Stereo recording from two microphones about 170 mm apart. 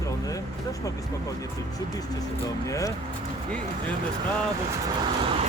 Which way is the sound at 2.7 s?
20° left (ahead or behind).